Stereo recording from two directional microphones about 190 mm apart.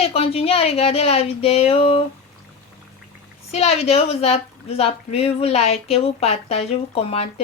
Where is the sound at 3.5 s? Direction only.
35° left (ahead or behind).